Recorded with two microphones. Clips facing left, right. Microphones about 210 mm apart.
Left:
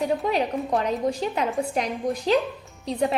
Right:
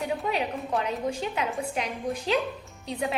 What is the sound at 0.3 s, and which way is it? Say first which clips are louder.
A woman's voice: left 5 dB; 40° left (ahead or behind).